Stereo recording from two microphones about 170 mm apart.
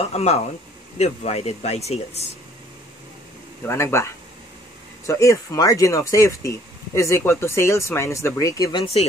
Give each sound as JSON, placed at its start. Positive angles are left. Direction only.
{"t": 0.0, "sound": "speech", "side_deg": 40}
{"t": 3.6, "sound": "speech", "side_deg": 15}